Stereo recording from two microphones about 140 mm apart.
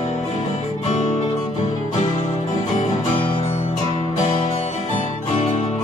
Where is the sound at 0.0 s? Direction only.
50° left (ahead or behind).